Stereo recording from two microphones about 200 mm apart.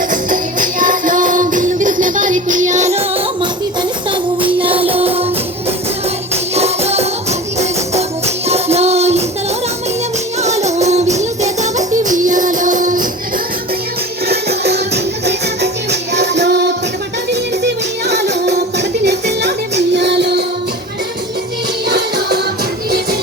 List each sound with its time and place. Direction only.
0.1 s music: 40° right (ahead or behind)
6.3 s music: 30° right (ahead or behind)
10.4 s music: 35° right (ahead or behind)
14.3 s music: 55° right (ahead or behind)
21.8 s music: 55° right (ahead or behind)